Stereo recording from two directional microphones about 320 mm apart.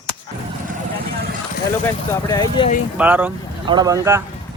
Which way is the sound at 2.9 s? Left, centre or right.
Centre.